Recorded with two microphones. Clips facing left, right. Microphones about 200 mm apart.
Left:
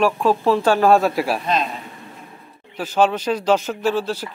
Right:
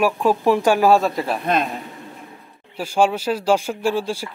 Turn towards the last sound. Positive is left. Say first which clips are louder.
# left 1 dB
turn(degrees=-10)  # may be behind; listen again after turning